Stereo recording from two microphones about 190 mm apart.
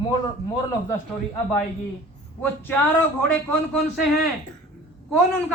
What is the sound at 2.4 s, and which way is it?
A man's voice, 10° left (ahead or behind).